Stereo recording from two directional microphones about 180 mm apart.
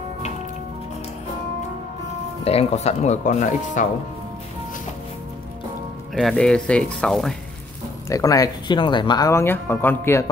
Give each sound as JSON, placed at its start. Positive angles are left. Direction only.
{"t": 2.4, "sound": "speech", "side_deg": 35}
{"t": 6.1, "sound": "speech", "side_deg": 0}
{"t": 8.1, "sound": "speech", "side_deg": 20}